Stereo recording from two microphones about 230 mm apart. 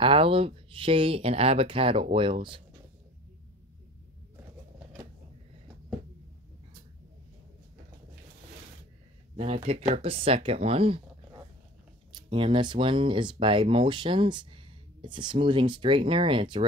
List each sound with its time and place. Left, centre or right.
0.0 s speech: right
9.4 s speech: right